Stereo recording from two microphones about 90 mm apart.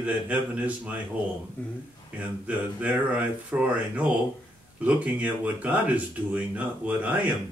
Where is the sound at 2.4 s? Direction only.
15° right (ahead or behind).